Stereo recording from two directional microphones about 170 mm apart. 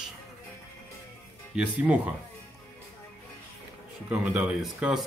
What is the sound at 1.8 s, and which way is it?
Speech, 10° right (ahead or behind).